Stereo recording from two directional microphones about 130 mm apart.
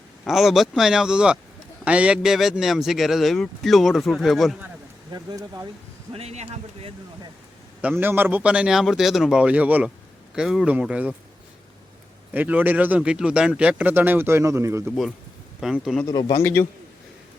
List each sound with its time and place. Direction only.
0.3 s a man's voice: centre (ahead or behind)
5.1 s speech: 25° right (ahead or behind)
6.1 s speech: 55° right (ahead or behind)
7.8 s a man's voice: 15° right (ahead or behind)
12.3 s a man's voice: 15° right (ahead or behind)
14.8 s a man's voice: centre (ahead or behind)
16.3 s a man's voice: 20° left (ahead or behind)